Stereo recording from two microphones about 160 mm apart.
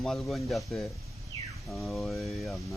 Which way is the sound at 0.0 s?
5° left (ahead or behind).